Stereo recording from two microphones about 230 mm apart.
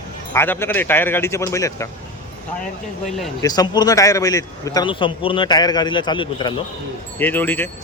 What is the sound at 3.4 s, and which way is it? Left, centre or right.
A man's voice, centre.